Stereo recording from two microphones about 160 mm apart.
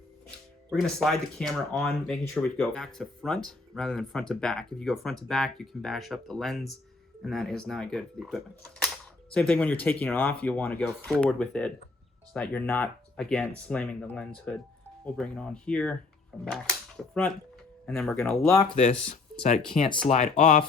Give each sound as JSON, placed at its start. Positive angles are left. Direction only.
{"t": 0.7, "sound": "speech", "side_deg": 0}
{"t": 17.8, "sound": "speech", "side_deg": 5}
{"t": 18.3, "sound": "speech", "side_deg": 20}
{"t": 19.0, "sound": "speech", "side_deg": 45}